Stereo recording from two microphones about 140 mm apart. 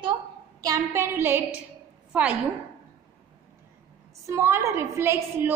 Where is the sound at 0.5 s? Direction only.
25° right (ahead or behind).